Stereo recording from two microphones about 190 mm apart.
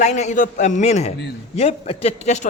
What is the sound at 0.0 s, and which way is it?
A man's voice, 40° left (ahead or behind).